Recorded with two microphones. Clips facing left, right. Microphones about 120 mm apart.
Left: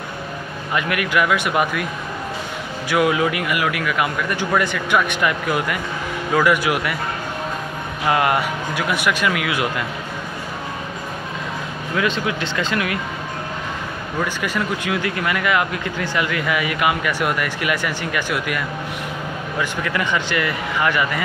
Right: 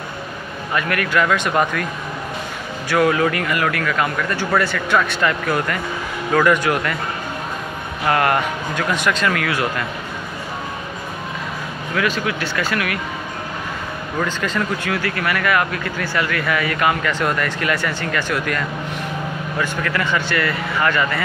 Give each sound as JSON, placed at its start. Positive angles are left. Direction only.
{"t": 0.7, "sound": "speech", "side_deg": 15}
{"t": 2.9, "sound": "speech", "side_deg": 15}
{"t": 8.1, "sound": "speech", "side_deg": 15}
{"t": 11.9, "sound": "speech", "side_deg": 20}
{"t": 14.2, "sound": "speech", "side_deg": 10}